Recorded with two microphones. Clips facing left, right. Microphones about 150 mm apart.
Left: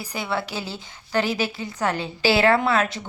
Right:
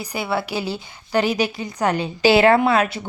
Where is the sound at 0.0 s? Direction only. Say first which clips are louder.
Right 3 dB; 10° right (ahead or behind).